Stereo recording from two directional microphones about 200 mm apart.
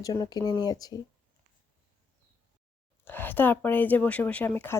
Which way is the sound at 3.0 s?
10° left (ahead or behind).